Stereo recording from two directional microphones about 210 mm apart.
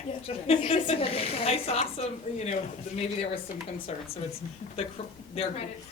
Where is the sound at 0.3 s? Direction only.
30° left (ahead or behind).